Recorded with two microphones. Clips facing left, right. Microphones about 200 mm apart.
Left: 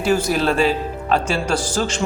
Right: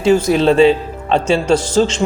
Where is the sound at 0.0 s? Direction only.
25° right (ahead or behind).